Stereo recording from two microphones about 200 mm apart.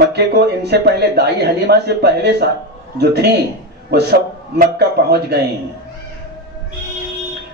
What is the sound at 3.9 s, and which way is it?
A man's voice, 55° right (ahead or behind).